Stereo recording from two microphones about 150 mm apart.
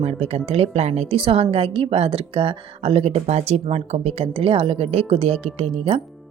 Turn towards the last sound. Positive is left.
turn(degrees=-40)  # may be behind; listen again after turning